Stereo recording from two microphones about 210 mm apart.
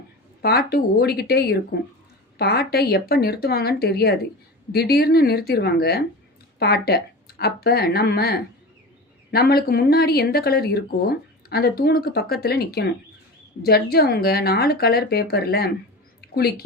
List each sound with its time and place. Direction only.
0.4 s a woman's voice: 50° left (ahead or behind)